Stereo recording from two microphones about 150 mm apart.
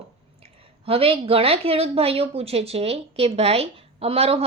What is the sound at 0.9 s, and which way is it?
A woman's voice, 40° right (ahead or behind).